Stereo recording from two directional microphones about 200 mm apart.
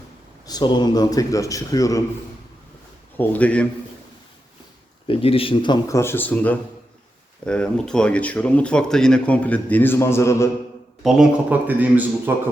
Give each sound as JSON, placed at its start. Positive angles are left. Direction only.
{"t": 0.4, "sound": "speech", "side_deg": 20}
{"t": 3.2, "sound": "speech", "side_deg": 5}
{"t": 5.0, "sound": "speech", "side_deg": 30}
{"t": 11.0, "sound": "a man's voice", "side_deg": -5}